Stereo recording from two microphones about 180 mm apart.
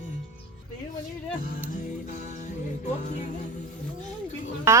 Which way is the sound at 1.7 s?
40° left (ahead or behind).